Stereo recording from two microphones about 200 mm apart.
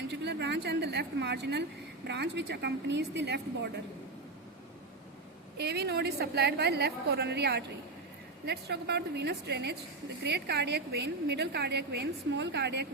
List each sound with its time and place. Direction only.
0.1 s a woman's voice: 60° right (ahead or behind)
5.5 s a woman's voice: 55° right (ahead or behind)